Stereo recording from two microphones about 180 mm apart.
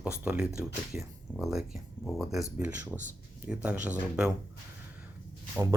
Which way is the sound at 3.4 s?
5° right (ahead or behind).